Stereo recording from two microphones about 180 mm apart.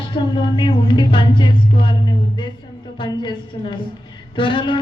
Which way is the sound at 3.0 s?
25° left (ahead or behind).